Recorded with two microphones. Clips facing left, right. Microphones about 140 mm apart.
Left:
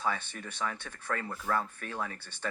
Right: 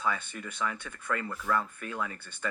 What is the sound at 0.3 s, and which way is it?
Speech, 40° left (ahead or behind).